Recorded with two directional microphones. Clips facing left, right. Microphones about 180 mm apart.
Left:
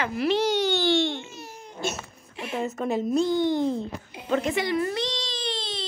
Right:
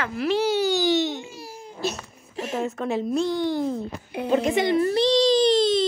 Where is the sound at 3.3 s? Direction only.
20° left (ahead or behind).